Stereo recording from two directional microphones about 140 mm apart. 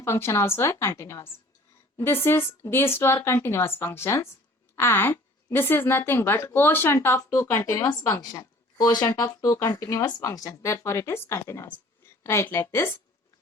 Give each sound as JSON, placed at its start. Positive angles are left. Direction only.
{"t": 0.0, "sound": "a woman's voice", "side_deg": 20}